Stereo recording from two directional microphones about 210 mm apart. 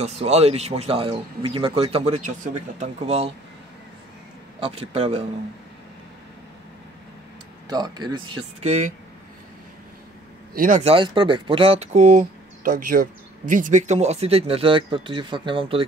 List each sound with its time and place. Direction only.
0.0 s speech: 30° right (ahead or behind)
4.6 s speech: 25° right (ahead or behind)
7.6 s speech: 20° right (ahead or behind)
10.5 s speech: 40° right (ahead or behind)